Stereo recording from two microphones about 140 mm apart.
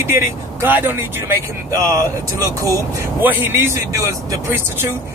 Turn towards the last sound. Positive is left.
turn(degrees=-15)  # may be behind; listen again after turning